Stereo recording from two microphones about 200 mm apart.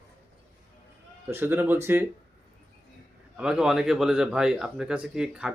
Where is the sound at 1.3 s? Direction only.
10° right (ahead or behind).